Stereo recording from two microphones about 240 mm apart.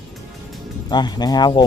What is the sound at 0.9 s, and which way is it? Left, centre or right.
Speech, centre.